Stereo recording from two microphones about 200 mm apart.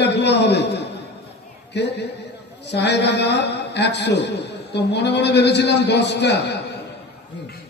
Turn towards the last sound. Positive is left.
turn(degrees=55)  # may be behind; listen again after turning